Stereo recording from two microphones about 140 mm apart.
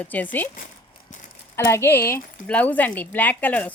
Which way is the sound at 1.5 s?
20° left (ahead or behind).